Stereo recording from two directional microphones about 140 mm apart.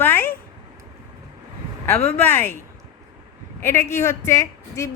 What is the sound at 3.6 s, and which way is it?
A woman's voice, 20° left (ahead or behind).